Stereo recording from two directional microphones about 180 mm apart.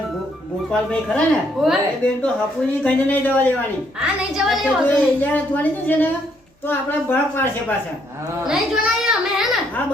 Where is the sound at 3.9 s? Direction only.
5° right (ahead or behind).